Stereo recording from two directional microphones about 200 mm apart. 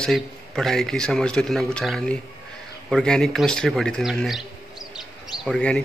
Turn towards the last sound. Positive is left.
turn(degrees=5)  # may be behind; listen again after turning